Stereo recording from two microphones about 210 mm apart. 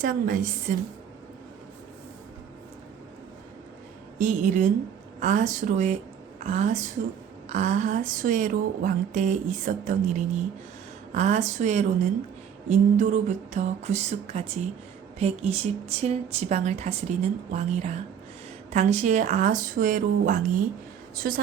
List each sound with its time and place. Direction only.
0.0 s a woman's voice: 40° right (ahead or behind)
4.2 s a woman's voice: 35° right (ahead or behind)